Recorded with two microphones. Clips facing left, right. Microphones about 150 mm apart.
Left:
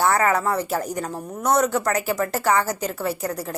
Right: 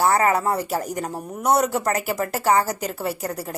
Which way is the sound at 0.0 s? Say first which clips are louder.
Right 1 dB; 30° right (ahead or behind).